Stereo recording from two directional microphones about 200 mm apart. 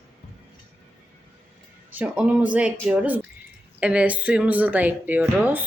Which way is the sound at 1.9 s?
5° right (ahead or behind).